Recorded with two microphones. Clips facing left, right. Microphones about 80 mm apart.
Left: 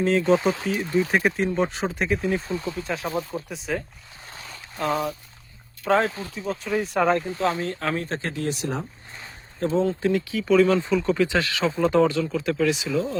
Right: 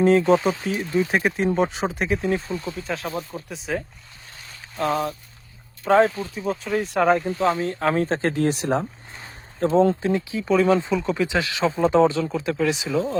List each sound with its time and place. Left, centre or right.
0.0 s speech: centre
7.9 s speech: right
9.6 s speech: right